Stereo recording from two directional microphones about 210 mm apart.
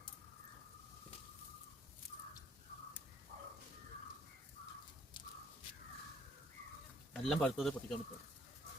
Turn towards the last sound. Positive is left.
turn(degrees=0)  # may be behind; listen again after turning